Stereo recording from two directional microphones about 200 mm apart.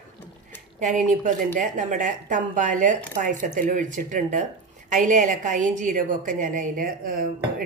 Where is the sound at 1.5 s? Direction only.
40° right (ahead or behind).